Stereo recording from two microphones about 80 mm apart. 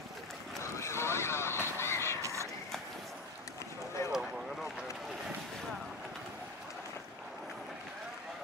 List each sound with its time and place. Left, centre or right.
0.7 s vehicle: left
1.8 s crow: left
4.0 s vehicle: left